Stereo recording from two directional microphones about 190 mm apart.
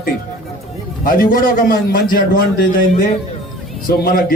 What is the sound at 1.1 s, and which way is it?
A man's voice, 50° left (ahead or behind).